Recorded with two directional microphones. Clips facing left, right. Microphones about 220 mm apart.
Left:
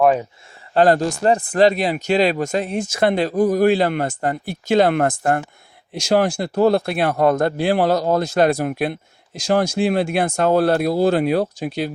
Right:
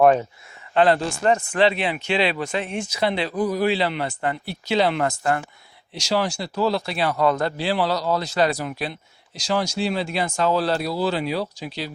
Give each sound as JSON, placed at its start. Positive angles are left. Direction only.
{"t": 0.7, "sound": "speech", "side_deg": 40}